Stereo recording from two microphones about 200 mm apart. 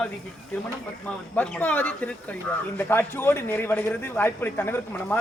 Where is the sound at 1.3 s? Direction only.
10° left (ahead or behind).